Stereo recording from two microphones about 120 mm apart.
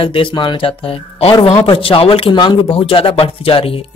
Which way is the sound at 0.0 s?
45° left (ahead or behind).